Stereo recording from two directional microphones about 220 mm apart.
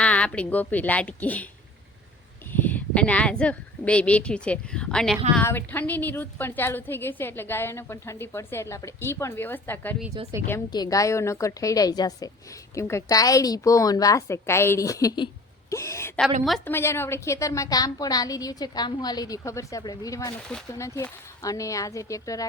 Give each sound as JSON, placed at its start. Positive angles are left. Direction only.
{"t": 0.0, "sound": "a woman's voice", "side_deg": 5}
{"t": 2.5, "sound": "a woman's voice", "side_deg": 10}
{"t": 16.4, "sound": "speech", "side_deg": 0}
{"t": 16.7, "sound": "a woman's voice", "side_deg": 10}